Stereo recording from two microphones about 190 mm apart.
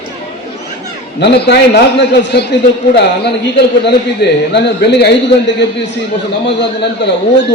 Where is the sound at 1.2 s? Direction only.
60° left (ahead or behind).